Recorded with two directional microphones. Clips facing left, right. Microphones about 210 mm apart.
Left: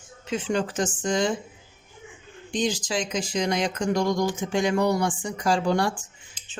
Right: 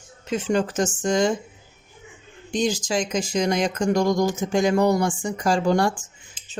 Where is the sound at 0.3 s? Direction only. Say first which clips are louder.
Right 3 dB; 45° right (ahead or behind).